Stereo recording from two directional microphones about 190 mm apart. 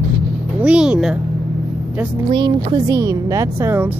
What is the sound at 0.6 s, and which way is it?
Speech, 5° right (ahead or behind).